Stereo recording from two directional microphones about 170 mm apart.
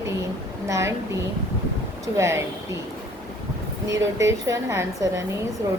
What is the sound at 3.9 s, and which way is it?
A woman's voice, 15° right (ahead or behind).